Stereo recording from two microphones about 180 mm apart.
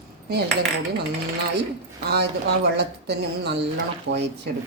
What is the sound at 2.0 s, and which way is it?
Speech, 65° right (ahead or behind).